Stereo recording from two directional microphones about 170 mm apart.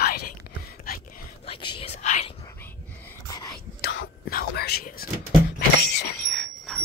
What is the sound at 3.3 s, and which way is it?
Whispering, 20° left (ahead or behind).